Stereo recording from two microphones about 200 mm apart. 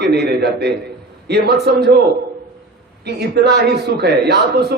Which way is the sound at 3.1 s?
55° right (ahead or behind).